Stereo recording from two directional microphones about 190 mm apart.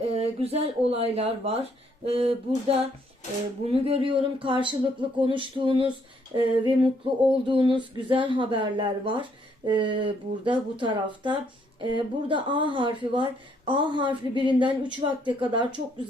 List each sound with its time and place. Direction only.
0.1 s speech: 30° right (ahead or behind)
2.0 s a sound: 30° right (ahead or behind)
3.7 s speech: 30° right (ahead or behind)